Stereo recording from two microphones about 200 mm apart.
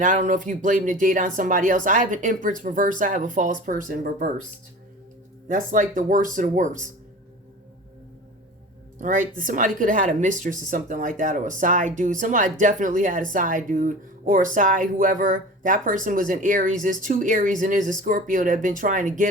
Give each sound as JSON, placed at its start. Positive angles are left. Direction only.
{"t": 0.0, "sound": "speech", "side_deg": -40}
{"t": 5.5, "sound": "speech", "side_deg": -40}
{"t": 9.0, "sound": "speech", "side_deg": -40}